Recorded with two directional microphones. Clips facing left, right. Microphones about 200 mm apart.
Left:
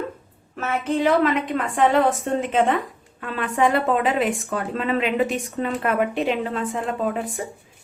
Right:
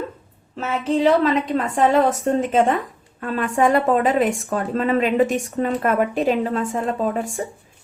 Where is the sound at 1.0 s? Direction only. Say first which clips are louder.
Right 2 dB; 35° right (ahead or behind).